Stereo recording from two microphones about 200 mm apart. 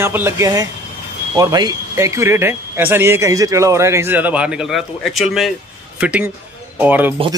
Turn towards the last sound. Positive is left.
turn(degrees=-10)  # may be behind; listen again after turning